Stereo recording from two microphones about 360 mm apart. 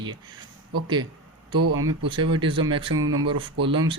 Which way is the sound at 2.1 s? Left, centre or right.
Centre.